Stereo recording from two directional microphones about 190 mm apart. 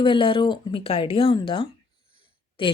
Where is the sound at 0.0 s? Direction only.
25° left (ahead or behind).